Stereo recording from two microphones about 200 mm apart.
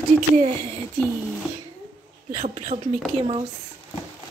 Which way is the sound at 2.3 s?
40° right (ahead or behind).